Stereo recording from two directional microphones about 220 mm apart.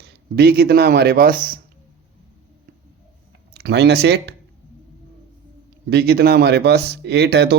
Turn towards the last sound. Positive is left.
turn(degrees=-50)  # may be behind; listen again after turning